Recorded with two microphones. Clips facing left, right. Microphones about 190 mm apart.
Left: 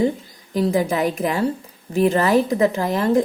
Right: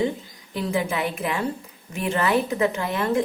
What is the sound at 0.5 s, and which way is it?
Speech, 40° left (ahead or behind).